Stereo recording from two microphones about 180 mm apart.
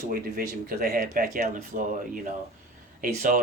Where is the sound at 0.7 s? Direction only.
55° right (ahead or behind).